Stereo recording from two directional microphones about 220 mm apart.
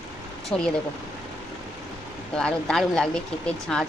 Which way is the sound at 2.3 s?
5° left (ahead or behind).